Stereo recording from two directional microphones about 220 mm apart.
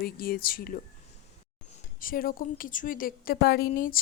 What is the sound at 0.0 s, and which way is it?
Speech, 45° left (ahead or behind).